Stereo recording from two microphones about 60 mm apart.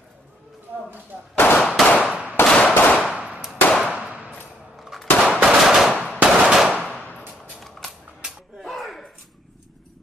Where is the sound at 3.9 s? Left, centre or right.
Centre.